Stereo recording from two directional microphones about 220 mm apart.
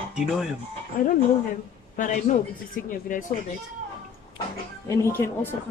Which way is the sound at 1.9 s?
35° left (ahead or behind).